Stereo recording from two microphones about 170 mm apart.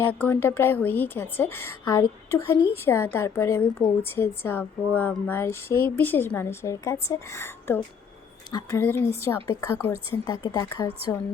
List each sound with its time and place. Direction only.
0.1 s a woman's voice: 10° left (ahead or behind)